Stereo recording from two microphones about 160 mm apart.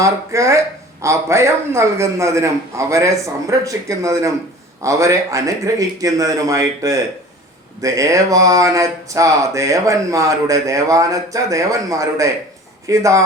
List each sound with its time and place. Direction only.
0.0 s speech: 20° right (ahead or behind)